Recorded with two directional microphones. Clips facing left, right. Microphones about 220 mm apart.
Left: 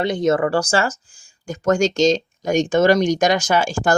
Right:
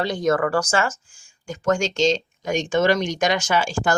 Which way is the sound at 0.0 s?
20° left (ahead or behind).